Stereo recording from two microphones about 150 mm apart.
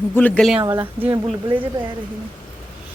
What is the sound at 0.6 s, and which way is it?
Speech, 30° right (ahead or behind).